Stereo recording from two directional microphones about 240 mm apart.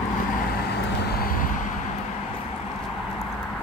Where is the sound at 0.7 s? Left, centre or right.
Left.